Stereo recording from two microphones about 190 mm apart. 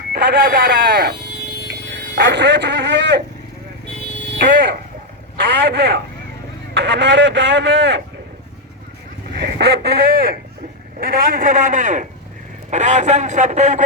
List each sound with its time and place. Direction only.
0.1 s vehicle: 60° right (ahead or behind)
1.6 s a sound: 65° right (ahead or behind)
4.5 s a man's voice: 65° right (ahead or behind)
9.3 s a man's voice: 60° right (ahead or behind); by 13.8 s 40° right (ahead or behind)